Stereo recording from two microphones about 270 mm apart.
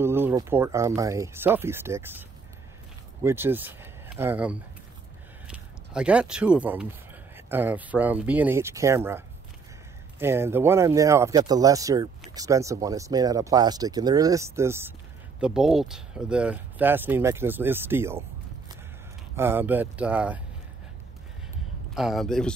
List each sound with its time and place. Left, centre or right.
0.0 s speech: centre
3.3 s speech: centre
19.3 s speech: centre
21.9 s speech: centre